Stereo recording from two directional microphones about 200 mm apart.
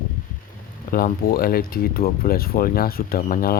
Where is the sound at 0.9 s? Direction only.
45° left (ahead or behind).